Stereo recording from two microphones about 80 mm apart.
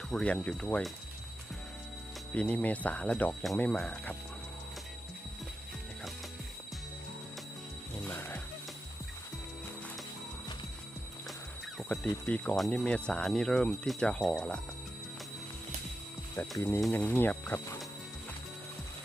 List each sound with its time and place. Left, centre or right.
0.1 s speech: centre
2.3 s speech: centre
8.0 s music: left
11.9 s speech: centre
12.5 s speech: centre
12.8 s speech: centre
16.3 s speech: left